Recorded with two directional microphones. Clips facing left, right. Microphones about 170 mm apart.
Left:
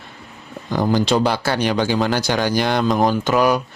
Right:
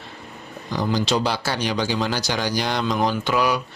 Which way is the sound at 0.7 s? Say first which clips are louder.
Left 5 dB; 50° left (ahead or behind).